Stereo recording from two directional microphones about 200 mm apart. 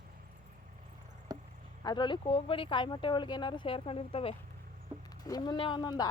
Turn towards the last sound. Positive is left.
turn(degrees=20)  # may be behind; listen again after turning